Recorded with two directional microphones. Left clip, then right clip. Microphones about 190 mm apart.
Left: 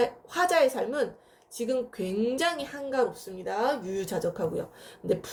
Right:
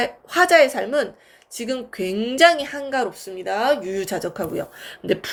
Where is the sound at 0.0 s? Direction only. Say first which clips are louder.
Right 7 dB; 25° right (ahead or behind).